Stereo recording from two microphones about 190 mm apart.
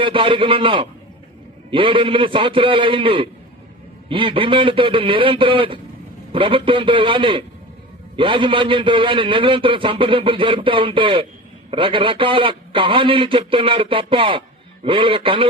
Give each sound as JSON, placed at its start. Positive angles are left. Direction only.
{"t": 0.0, "sound": "a man's voice", "side_deg": -25}